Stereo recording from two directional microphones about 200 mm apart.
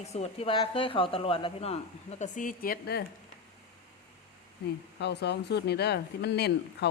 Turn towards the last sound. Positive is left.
turn(degrees=55)  # may be behind; listen again after turning